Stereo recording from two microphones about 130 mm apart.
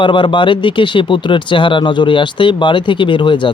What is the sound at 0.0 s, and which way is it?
Speech, 40° left (ahead or behind).